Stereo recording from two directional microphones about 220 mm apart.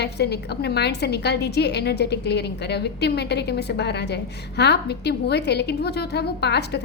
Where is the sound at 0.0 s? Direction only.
50° left (ahead or behind).